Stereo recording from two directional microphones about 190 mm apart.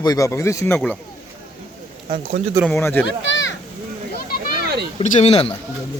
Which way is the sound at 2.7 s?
10° left (ahead or behind).